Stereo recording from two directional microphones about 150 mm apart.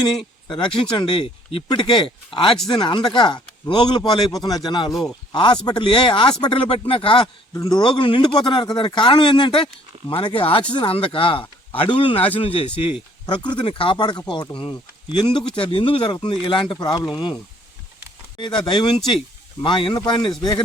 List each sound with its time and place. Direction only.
0.6 s speech: 35° left (ahead or behind)
4.9 s speech: centre (ahead or behind)
5.3 s speech: 30° left (ahead or behind)
7.5 s speech: 25° left (ahead or behind)
18.3 s speech: 35° left (ahead or behind)